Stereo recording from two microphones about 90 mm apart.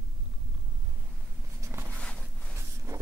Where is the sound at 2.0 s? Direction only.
10° left (ahead or behind).